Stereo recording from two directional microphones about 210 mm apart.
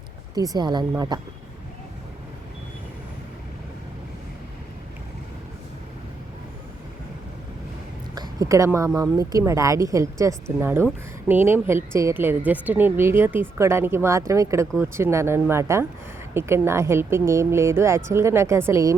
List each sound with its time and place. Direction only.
0.3 s speech: 20° right (ahead or behind)
8.1 s a woman's voice: 20° right (ahead or behind)